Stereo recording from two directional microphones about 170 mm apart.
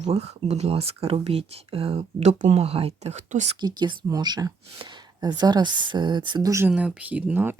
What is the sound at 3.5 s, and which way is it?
Speech, 25° right (ahead or behind).